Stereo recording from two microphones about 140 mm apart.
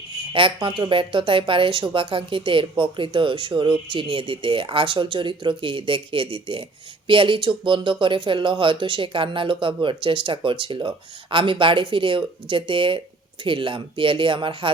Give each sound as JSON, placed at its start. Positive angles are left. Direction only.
{"t": 0.3, "sound": "speech", "side_deg": -35}